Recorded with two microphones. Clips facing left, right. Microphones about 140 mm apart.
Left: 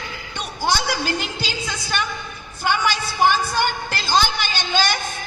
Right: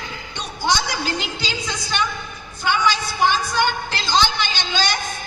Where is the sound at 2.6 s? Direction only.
50° left (ahead or behind).